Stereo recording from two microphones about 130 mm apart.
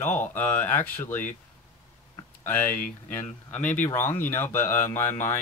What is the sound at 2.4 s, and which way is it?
Speech, 15° left (ahead or behind).